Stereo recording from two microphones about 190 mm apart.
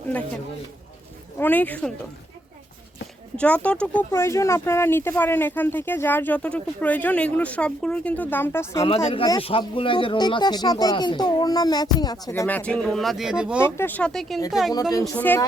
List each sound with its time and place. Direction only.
1.4 s speech: 10° left (ahead or behind)
3.3 s speech: 5° left (ahead or behind)
9.0 s speech: 25° left (ahead or behind); by 13.7 s 5° right (ahead or behind)
13.7 s speech: 10° left (ahead or behind)